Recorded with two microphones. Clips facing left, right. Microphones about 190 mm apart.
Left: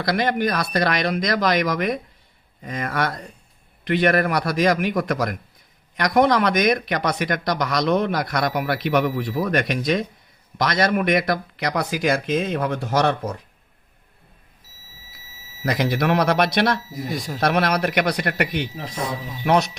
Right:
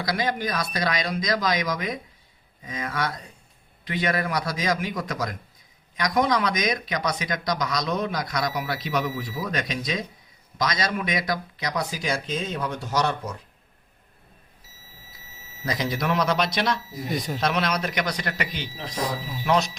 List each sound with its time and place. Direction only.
0.0 s speech: 60° left (ahead or behind)
15.6 s speech: 60° left (ahead or behind)
17.1 s speech: centre (ahead or behind)
17.4 s speech: 60° left (ahead or behind)